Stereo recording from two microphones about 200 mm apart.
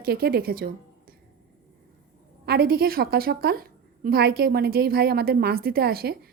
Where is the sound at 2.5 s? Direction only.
50° right (ahead or behind).